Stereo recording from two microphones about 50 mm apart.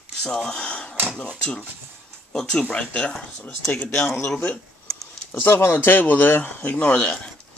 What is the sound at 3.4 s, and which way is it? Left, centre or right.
Speech, left.